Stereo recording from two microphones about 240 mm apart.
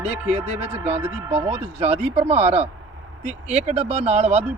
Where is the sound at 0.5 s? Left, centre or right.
Right.